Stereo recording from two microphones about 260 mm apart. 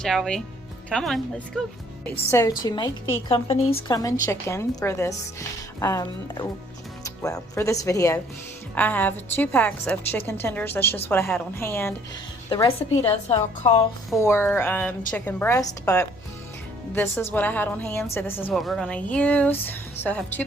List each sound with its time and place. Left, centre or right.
0.0 s a woman's voice: centre; by 13.7 s left
14.2 s a woman's voice: centre